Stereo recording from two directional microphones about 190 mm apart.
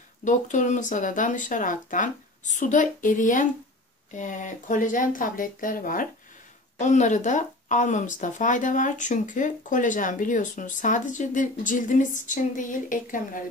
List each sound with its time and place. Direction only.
0.2 s speech: 40° left (ahead or behind)